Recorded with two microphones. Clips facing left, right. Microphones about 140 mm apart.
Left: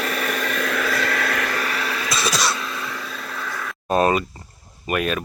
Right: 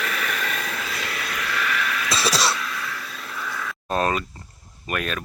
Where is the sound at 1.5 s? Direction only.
35° left (ahead or behind).